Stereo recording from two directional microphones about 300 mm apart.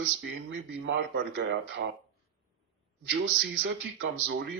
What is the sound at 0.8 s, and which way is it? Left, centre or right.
Speech, right.